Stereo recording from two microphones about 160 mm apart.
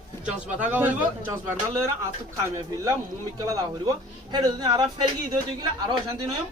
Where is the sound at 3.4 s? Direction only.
25° right (ahead or behind).